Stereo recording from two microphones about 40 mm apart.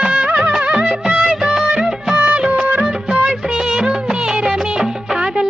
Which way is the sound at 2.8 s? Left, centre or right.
Centre.